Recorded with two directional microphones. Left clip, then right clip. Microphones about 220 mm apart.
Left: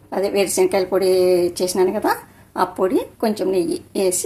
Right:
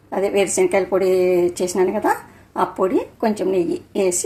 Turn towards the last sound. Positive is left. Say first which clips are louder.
# even
turn(degrees=0)  # may be behind; listen again after turning